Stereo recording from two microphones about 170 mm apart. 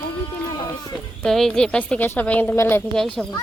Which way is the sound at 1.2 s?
5° left (ahead or behind).